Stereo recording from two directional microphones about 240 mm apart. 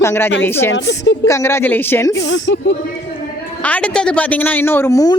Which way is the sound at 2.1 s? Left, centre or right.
Left.